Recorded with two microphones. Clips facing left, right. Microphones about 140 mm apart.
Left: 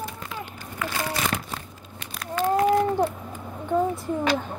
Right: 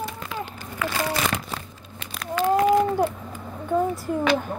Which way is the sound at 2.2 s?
90° right.